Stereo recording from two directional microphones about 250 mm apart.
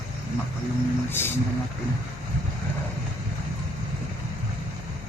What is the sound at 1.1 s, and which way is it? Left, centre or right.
Speech, centre.